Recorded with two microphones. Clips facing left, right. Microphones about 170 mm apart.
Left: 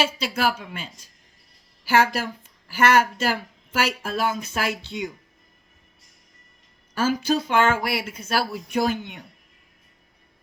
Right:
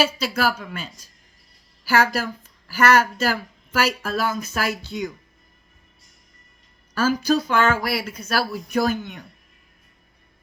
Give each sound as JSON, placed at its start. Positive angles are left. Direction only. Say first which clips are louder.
{"t": 0.2, "sound": "a woman's voice", "louder": "right 1 dB", "side_deg": 25}
{"t": 7.2, "sound": "a woman's voice", "louder": "even", "side_deg": 25}